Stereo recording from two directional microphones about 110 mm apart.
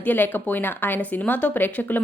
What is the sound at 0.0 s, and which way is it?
Speech, 15° left (ahead or behind).